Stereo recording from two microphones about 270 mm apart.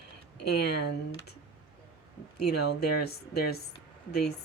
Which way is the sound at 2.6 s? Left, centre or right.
Left.